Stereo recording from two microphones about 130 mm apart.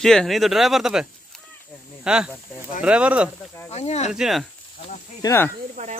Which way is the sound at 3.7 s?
55° left (ahead or behind).